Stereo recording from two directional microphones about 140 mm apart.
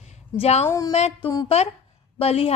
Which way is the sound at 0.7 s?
25° left (ahead or behind).